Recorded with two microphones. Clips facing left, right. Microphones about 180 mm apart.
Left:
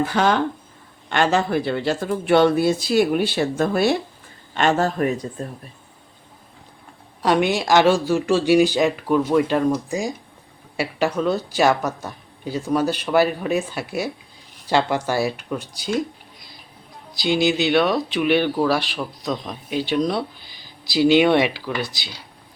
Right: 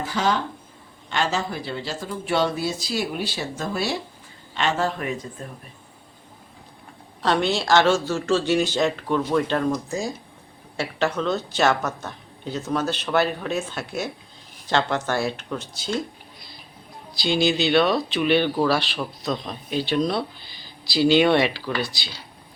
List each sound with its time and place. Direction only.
0.0 s speech: 60° left (ahead or behind); by 5.5 s 35° left (ahead or behind)
7.2 s speech: 15° left (ahead or behind)
17.2 s speech: 15° left (ahead or behind)